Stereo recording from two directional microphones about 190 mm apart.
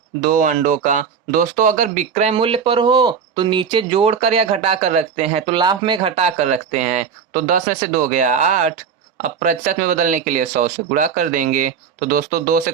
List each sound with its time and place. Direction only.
0.2 s speech: 45° right (ahead or behind)
8.2 s speech: 40° right (ahead or behind)